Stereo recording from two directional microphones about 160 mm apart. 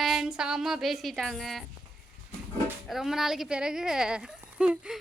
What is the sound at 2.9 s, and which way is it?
A woman's voice, centre (ahead or behind).